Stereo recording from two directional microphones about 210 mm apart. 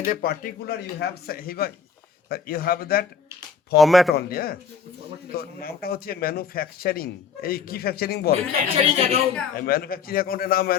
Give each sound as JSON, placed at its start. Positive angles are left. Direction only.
{"t": 0.0, "sound": "speech", "side_deg": 40}
{"t": 3.8, "sound": "speech", "side_deg": 0}
{"t": 4.1, "sound": "speech", "side_deg": 50}
{"t": 8.7, "sound": "a woman's voice", "side_deg": -30}
{"t": 9.6, "sound": "speech", "side_deg": 45}